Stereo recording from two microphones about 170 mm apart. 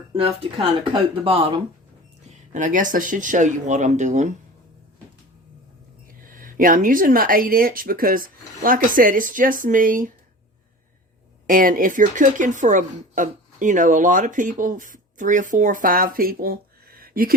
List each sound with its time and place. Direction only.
1.2 s speech: 30° right (ahead or behind)
2.5 s a woman's voice: 50° right (ahead or behind)
6.2 s speech: 55° right (ahead or behind)
11.4 s a woman's voice: 55° right (ahead or behind)